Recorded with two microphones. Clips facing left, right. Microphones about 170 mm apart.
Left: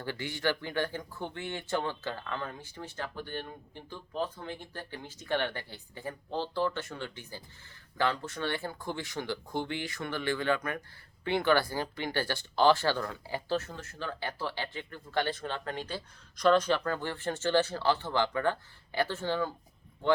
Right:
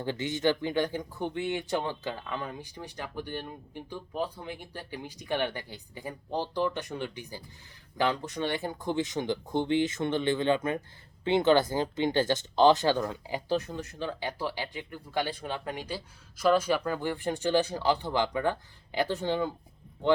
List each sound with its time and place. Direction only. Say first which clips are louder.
0.0 s speech: right 5 dB; 20° right (ahead or behind)